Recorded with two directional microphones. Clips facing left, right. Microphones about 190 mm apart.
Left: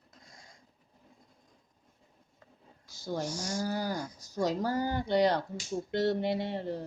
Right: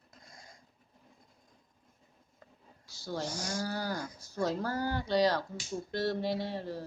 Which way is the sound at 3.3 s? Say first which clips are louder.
Left 2 dB; 60° right (ahead or behind).